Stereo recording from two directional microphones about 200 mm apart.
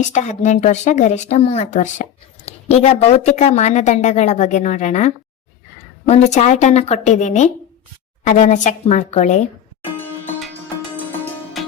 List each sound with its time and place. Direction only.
0.1 s speech: 35° left (ahead or behind)